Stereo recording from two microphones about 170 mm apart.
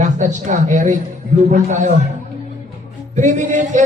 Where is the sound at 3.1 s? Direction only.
45° right (ahead or behind).